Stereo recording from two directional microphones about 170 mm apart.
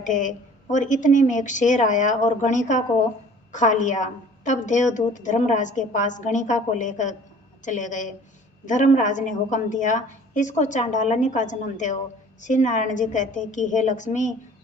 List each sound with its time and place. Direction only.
0.0 s a woman's voice: 50° left (ahead or behind)